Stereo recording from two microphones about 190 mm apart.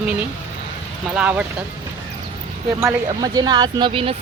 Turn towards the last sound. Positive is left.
turn(degrees=-30)  # may be behind; listen again after turning